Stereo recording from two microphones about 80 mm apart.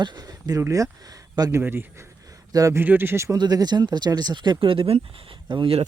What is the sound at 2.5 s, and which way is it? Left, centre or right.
Speech, right.